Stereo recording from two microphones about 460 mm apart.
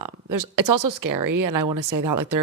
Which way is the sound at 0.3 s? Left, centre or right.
Right.